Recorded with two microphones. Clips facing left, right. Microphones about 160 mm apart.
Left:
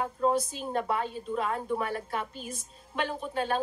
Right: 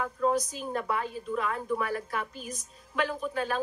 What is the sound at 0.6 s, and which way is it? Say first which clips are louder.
Speech: left 1 dB; 30° left (ahead or behind).